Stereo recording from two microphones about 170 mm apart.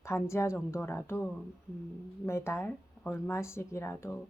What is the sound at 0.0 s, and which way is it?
Speech, 15° left (ahead or behind).